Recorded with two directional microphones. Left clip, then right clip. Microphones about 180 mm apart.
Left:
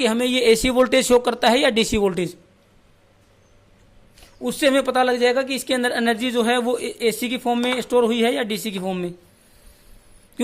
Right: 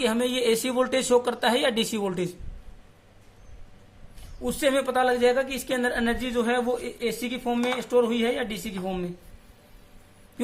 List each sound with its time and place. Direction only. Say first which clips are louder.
0.0 s speech: left 6 dB; 40° left (ahead or behind)
4.4 s speech: left 5 dB; 50° left (ahead or behind)